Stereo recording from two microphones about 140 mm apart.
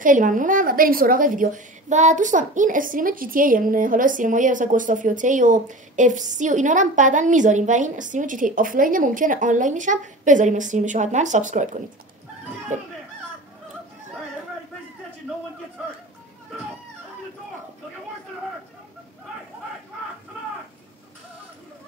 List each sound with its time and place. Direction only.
0.0 s a woman's voice: 70° right (ahead or behind)